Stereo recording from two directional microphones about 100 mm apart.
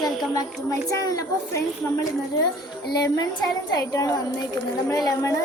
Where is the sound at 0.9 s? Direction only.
35° left (ahead or behind).